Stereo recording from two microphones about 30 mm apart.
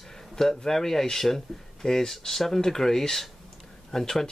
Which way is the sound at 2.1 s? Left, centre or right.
Centre.